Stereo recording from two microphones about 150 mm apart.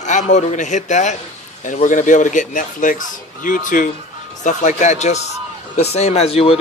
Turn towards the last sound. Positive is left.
turn(degrees=40)  # may be behind; listen again after turning